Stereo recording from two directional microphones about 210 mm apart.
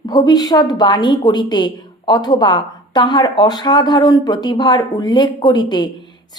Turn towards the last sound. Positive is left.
turn(degrees=20)  # may be behind; listen again after turning